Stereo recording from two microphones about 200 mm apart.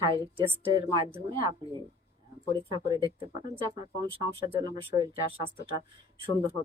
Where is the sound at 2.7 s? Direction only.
20° right (ahead or behind).